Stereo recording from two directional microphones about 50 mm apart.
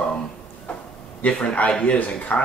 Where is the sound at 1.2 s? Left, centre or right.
Left.